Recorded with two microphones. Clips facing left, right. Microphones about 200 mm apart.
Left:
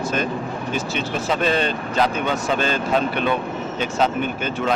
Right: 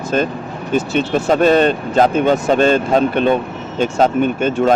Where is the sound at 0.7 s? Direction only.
45° right (ahead or behind).